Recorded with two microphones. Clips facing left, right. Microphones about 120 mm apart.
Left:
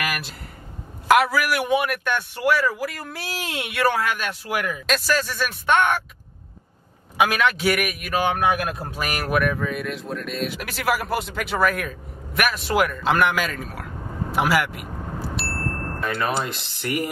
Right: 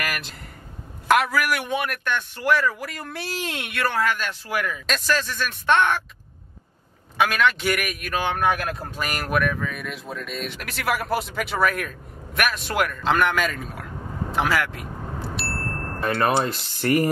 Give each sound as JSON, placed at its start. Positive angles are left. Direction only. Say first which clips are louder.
{"t": 0.0, "sound": "a sound", "louder": "left 2 dB", "side_deg": 5}
{"t": 1.0, "sound": "a man's voice", "louder": "left 2 dB", "side_deg": 5}
{"t": 4.8, "sound": "a man's voice", "louder": "left 2 dB", "side_deg": 5}
{"t": 7.2, "sound": "a man's voice", "louder": "left 1 dB", "side_deg": 10}
{"t": 15.3, "sound": "ding", "louder": "left 2 dB", "side_deg": 0}
{"t": 16.2, "sound": "speech", "louder": "right 6 dB", "side_deg": -45}